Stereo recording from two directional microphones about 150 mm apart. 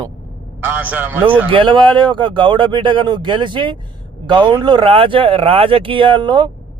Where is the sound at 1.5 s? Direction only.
35° right (ahead or behind).